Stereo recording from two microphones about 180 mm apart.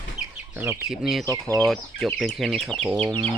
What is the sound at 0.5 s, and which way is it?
Speech, 10° right (ahead or behind).